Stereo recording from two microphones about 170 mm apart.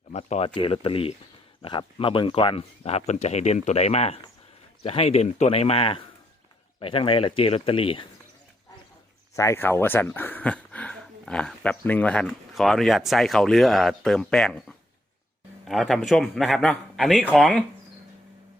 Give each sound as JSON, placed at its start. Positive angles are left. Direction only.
{"t": 0.1, "sound": "speech", "side_deg": 40}
{"t": 9.3, "sound": "a man's voice", "side_deg": 15}